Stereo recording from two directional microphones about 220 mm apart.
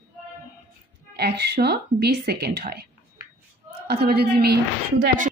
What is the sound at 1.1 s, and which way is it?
Speech, 50° right (ahead or behind).